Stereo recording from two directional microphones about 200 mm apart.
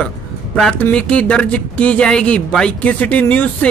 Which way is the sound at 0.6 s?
5° left (ahead or behind).